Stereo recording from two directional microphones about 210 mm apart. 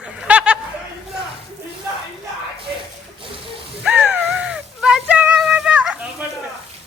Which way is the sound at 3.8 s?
5° right (ahead or behind).